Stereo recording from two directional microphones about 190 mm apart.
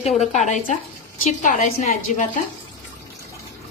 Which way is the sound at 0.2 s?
40° left (ahead or behind).